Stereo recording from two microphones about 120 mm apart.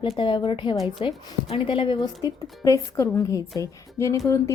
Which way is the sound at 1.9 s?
30° left (ahead or behind).